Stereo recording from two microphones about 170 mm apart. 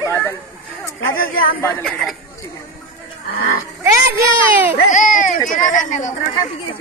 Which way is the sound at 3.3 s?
60° left (ahead or behind).